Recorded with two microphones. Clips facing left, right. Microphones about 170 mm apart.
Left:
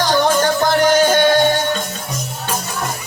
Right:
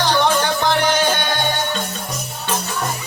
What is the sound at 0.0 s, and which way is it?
Music, 45° left (ahead or behind).